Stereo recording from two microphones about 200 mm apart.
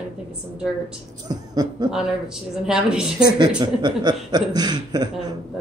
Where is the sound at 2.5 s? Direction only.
5° right (ahead or behind).